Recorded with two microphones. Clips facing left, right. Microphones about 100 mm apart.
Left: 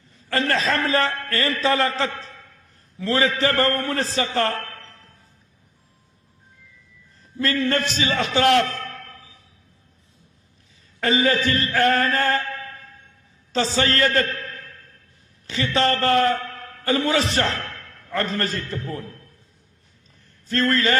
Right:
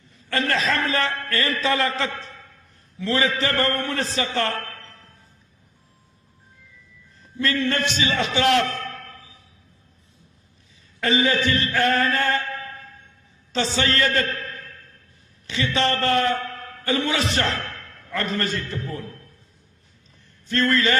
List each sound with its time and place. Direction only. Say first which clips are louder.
0.3 s a man's voice: left 1 dB; 35° left (ahead or behind)
7.3 s a man's voice: left 1 dB; 40° left (ahead or behind)
11.0 s a man's voice: left 1 dB; 40° left (ahead or behind)
13.7 s a man's voice: left 2 dB; 40° left (ahead or behind)
15.4 s a man's voice: left 2 dB; 35° left (ahead or behind)
20.5 s a man's voice: even; 35° left (ahead or behind)